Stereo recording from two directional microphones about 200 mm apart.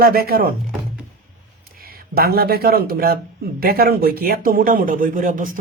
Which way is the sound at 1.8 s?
50° right (ahead or behind).